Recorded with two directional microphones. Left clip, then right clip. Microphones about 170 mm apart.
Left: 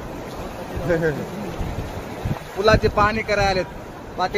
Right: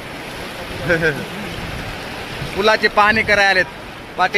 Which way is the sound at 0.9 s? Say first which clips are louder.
Right 4 dB; 5° right (ahead or behind).